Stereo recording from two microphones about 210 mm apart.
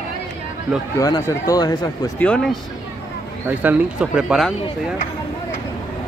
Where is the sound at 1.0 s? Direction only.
20° left (ahead or behind).